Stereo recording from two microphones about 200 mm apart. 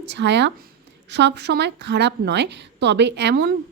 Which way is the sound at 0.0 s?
60° right (ahead or behind).